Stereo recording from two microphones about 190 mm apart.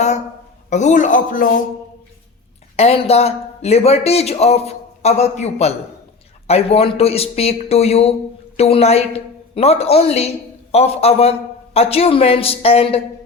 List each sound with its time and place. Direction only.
0.7 s speech: 40° left (ahead or behind)
2.7 s a woman's voice: 30° left (ahead or behind)